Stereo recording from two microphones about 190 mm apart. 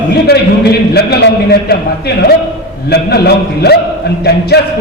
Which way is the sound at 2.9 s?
60° left (ahead or behind).